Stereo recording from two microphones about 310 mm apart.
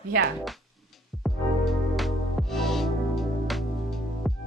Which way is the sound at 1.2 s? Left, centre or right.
Centre.